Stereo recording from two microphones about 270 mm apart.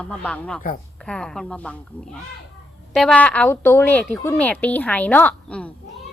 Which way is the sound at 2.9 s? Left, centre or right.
Centre.